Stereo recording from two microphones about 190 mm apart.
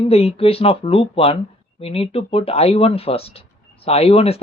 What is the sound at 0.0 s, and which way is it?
Speech, 30° left (ahead or behind).